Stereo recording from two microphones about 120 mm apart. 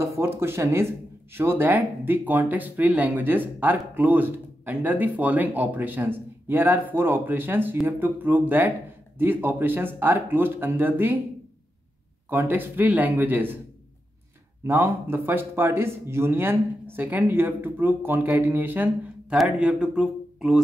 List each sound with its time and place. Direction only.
0.0 s speech: 20° right (ahead or behind)
12.3 s speech: 15° right (ahead or behind)
14.6 s speech: 20° right (ahead or behind)